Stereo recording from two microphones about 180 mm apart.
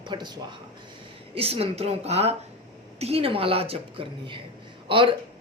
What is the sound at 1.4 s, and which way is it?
A man's voice, 35° right (ahead or behind).